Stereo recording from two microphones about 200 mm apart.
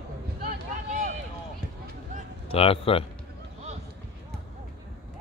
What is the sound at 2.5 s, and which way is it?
Speech, 30° left (ahead or behind).